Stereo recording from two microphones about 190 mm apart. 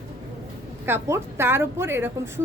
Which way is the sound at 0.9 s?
15° right (ahead or behind).